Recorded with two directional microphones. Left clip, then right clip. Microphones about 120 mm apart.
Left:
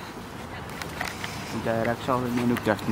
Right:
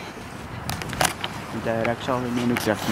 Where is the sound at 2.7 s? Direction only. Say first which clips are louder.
Even; 15° left (ahead or behind).